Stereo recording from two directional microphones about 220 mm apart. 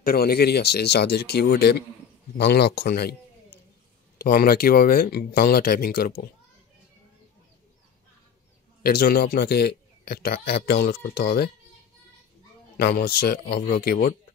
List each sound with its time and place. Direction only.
0.0 s a man's voice: 45° left (ahead or behind)
8.8 s speech: 45° left (ahead or behind)
12.7 s speech: 45° left (ahead or behind)